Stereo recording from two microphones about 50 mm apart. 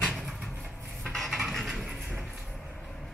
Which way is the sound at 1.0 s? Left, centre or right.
Centre.